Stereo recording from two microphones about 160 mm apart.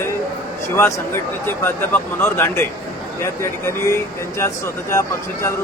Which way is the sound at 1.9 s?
15° left (ahead or behind).